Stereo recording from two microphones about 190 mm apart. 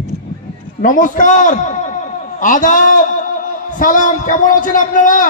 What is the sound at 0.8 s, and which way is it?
A man's voice, 45° left (ahead or behind).